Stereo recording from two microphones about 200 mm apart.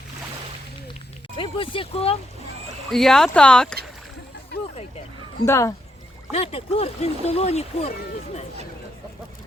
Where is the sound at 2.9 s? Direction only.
Centre (ahead or behind).